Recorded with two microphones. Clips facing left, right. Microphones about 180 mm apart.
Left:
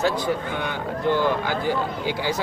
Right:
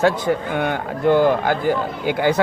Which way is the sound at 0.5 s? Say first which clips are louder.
Right 5 dB; 55° right (ahead or behind).